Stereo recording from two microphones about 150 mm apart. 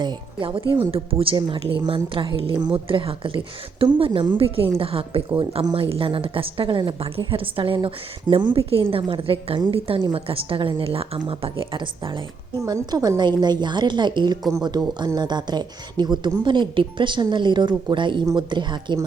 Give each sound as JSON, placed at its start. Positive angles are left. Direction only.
{"t": 0.0, "sound": "a woman's voice", "side_deg": -30}